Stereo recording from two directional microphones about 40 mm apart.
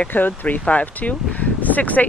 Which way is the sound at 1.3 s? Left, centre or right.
Left.